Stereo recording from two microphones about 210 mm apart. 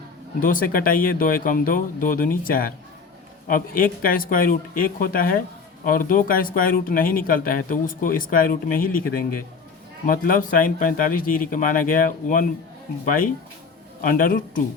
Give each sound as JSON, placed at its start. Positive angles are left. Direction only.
{"t": 0.3, "sound": "speech", "side_deg": 40}
{"t": 14.0, "sound": "speech", "side_deg": 40}